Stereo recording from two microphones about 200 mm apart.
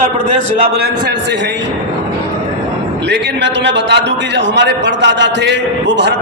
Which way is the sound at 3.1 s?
65° right (ahead or behind).